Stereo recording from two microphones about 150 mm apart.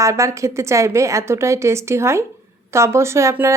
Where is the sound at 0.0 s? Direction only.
20° right (ahead or behind).